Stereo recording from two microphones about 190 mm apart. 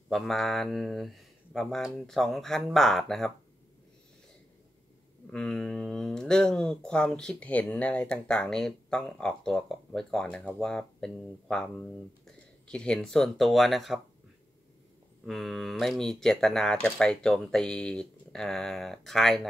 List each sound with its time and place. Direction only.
0.1 s speech: centre (ahead or behind)
5.2 s speech: 5° left (ahead or behind)
15.2 s speech: centre (ahead or behind)